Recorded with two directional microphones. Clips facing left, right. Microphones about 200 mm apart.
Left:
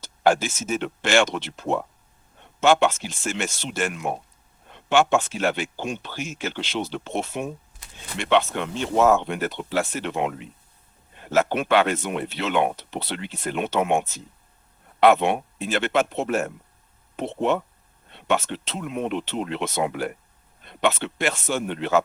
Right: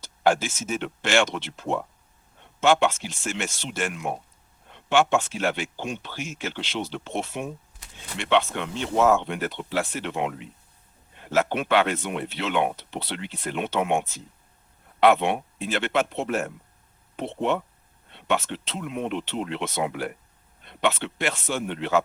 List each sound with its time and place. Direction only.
0.0 s speech: 40° left (ahead or behind)